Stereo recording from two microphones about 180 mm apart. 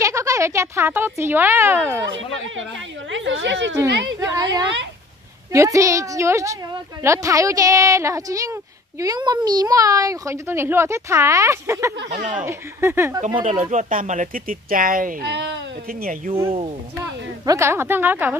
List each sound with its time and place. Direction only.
0.0 s speech: 15° right (ahead or behind)
3.1 s speech: 90° right
3.9 s a woman's voice: 70° right (ahead or behind)
5.5 s a woman's voice: 15° right (ahead or behind)
12.1 s speech: 45° right (ahead or behind)
12.4 s a woman's voice: 15° right (ahead or behind)
13.4 s speech: 45° right (ahead or behind)
15.3 s speech: 70° right (ahead or behind); by 16.2 s 55° right (ahead or behind)
16.4 s speech: 30° right (ahead or behind)
17.0 s a woman's voice: 15° right (ahead or behind)